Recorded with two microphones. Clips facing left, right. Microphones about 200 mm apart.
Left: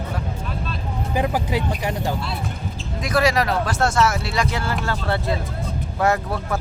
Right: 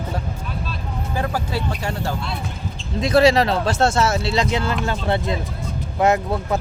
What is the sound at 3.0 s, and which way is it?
Speech, 25° right (ahead or behind).